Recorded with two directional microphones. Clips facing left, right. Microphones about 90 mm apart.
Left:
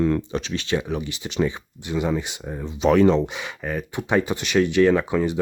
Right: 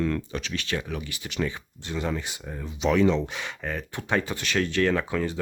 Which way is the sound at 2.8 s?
45° left (ahead or behind).